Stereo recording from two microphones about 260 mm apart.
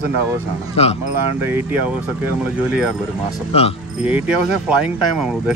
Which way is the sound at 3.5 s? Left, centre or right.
Left.